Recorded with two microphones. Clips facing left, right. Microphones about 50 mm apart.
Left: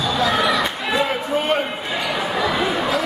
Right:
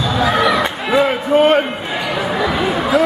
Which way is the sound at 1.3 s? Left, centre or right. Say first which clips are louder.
Right 12 dB; right.